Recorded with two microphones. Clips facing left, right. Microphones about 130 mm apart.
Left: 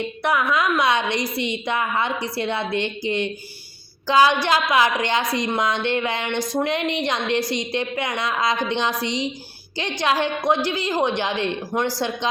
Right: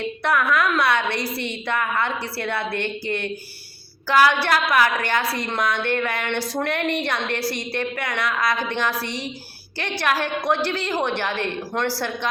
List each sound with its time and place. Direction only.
0.0 s a woman's voice: 15° left (ahead or behind)